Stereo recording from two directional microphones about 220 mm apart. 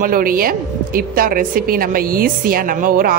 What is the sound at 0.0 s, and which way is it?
A woman's voice, 40° right (ahead or behind).